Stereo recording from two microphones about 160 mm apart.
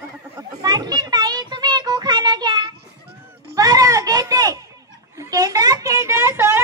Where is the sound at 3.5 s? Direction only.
20° right (ahead or behind).